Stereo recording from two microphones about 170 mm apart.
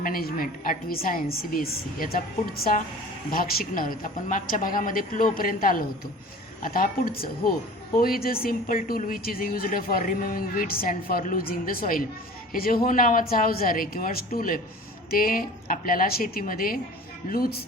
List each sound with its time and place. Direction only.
0.0 s a woman's voice: 60° left (ahead or behind)
3.3 s a woman's voice: 55° left (ahead or behind)